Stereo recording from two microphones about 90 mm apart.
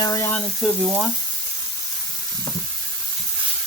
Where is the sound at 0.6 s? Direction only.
Centre (ahead or behind).